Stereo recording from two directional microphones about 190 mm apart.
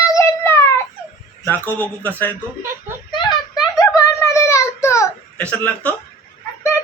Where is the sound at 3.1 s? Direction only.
25° left (ahead or behind).